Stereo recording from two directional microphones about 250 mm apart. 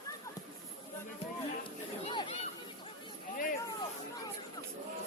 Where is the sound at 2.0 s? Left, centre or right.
Centre.